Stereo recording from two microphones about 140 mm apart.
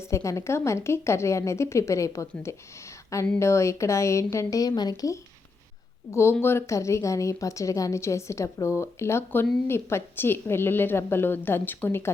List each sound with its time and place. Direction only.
0.1 s a woman's voice: 20° left (ahead or behind)